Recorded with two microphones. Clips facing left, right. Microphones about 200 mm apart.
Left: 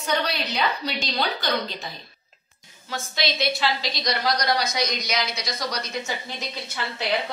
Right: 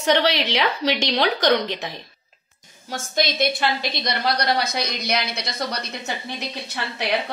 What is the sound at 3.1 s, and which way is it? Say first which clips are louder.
A woman's voice: right 4 dB; 45° right (ahead or behind).